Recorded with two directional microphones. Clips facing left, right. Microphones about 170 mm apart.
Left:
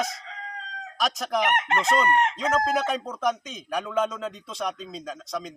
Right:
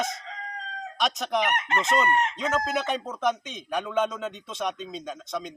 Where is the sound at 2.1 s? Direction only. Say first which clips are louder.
Left 2 dB; 65° left (ahead or behind).